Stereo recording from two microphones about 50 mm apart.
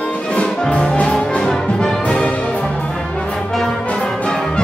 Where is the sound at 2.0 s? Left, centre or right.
Left.